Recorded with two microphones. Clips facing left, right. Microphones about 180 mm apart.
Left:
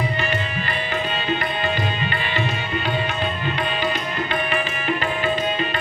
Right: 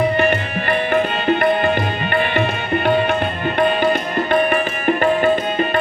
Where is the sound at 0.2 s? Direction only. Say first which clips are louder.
Right 7 dB; 55° right (ahead or behind).